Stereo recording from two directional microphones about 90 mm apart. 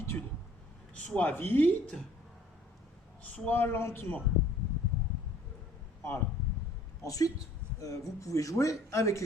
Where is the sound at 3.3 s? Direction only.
20° left (ahead or behind).